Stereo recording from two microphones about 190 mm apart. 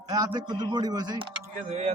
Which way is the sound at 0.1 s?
20° right (ahead or behind).